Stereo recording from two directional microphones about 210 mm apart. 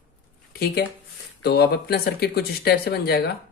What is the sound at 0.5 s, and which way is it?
Speech, 45° left (ahead or behind).